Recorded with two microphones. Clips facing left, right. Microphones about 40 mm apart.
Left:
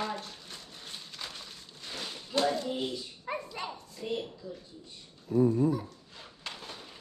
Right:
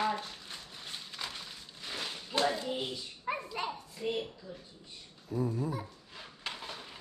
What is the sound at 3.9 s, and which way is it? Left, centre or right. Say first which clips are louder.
Speech: left 1 dB; centre.